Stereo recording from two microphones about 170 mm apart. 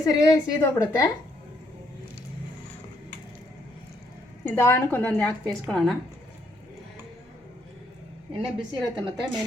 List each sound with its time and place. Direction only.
0.0 s a woman's voice: 20° left (ahead or behind)
4.4 s a woman's voice: 15° left (ahead or behind)
8.3 s a woman's voice: 25° right (ahead or behind)